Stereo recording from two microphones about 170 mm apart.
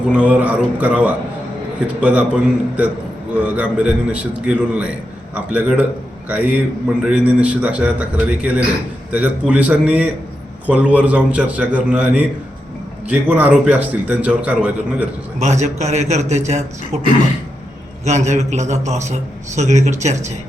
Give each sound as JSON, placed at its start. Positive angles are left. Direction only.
{"t": 0.1, "sound": "a man's voice", "side_deg": -5}
{"t": 15.4, "sound": "a man's voice", "side_deg": -40}
{"t": 18.0, "sound": "a man's voice", "side_deg": -40}